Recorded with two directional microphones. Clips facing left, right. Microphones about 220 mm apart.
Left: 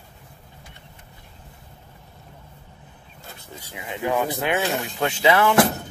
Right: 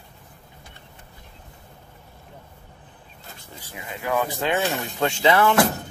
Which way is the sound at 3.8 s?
20° left (ahead or behind).